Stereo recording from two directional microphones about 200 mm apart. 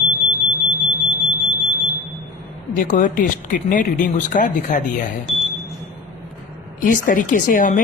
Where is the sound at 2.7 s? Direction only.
40° left (ahead or behind).